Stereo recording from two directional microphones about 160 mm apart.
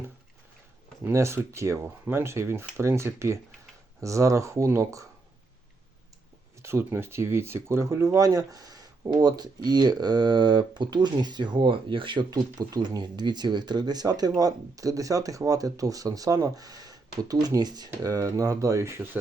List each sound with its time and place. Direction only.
1.0 s speech: 15° right (ahead or behind)
6.6 s speech: 15° right (ahead or behind)